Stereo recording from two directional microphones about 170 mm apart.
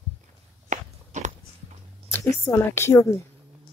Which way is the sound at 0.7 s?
45° right (ahead or behind).